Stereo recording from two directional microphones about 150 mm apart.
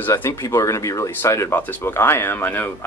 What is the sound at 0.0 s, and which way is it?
Speech, 20° left (ahead or behind).